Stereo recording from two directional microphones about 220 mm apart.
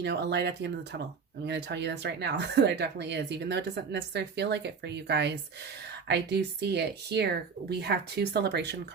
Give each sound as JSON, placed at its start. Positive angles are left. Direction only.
{"t": 0.0, "sound": "speech", "side_deg": -50}